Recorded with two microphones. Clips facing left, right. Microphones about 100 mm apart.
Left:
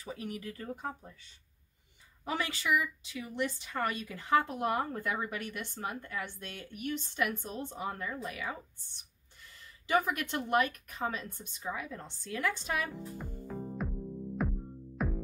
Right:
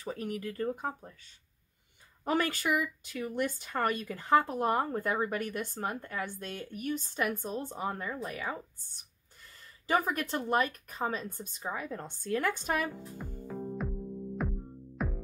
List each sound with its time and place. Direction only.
0.0 s speech: 45° right (ahead or behind)
2.2 s speech: 50° right (ahead or behind)
9.8 s speech: 40° right (ahead or behind)
12.9 s music: centre (ahead or behind)